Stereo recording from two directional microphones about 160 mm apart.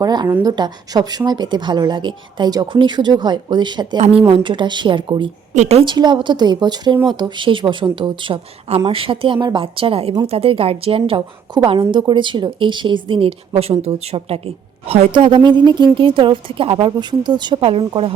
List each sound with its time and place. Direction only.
0.0 s speech: 25° right (ahead or behind)
3.9 s a woman's voice: 40° right (ahead or behind)
5.5 s a woman's voice: 40° right (ahead or behind)
5.8 s a woman's voice: 30° right (ahead or behind)